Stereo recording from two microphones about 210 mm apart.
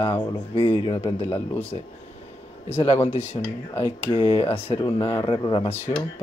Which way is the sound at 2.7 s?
30° left (ahead or behind).